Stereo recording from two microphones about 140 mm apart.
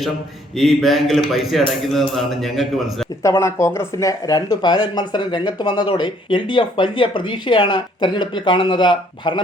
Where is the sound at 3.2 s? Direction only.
20° left (ahead or behind).